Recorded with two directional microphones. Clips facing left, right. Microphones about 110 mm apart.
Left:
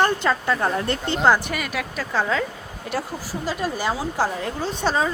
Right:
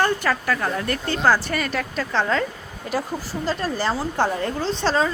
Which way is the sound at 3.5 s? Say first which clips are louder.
Right 1 dB; 10° left (ahead or behind).